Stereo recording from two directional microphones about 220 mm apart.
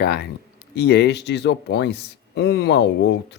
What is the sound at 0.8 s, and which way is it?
Speech, 50° left (ahead or behind).